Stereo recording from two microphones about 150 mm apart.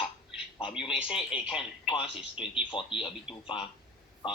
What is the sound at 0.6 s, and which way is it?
Speech, 5° right (ahead or behind).